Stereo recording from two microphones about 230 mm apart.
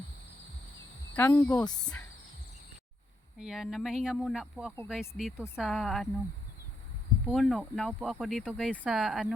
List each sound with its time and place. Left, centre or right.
1.1 s speech: centre
3.4 s speech: centre
7.3 s speech: centre